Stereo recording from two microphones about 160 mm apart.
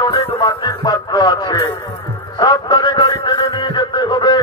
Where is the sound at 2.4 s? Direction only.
25° left (ahead or behind).